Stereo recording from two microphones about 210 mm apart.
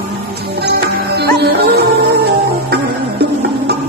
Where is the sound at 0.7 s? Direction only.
50° right (ahead or behind).